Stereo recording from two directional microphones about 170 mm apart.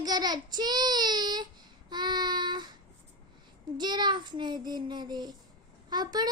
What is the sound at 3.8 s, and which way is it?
A child's voice, 25° right (ahead or behind).